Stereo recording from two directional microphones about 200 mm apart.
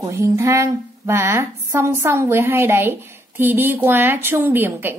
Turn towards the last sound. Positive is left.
turn(degrees=-10)  # may be behind; listen again after turning